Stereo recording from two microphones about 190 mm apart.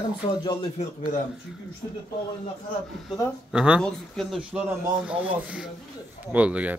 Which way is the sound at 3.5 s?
5° right (ahead or behind).